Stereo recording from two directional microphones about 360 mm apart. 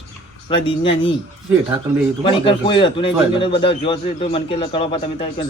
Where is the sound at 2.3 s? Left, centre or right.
Centre.